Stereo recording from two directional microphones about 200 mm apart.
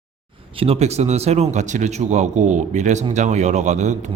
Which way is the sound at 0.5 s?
30° right (ahead or behind).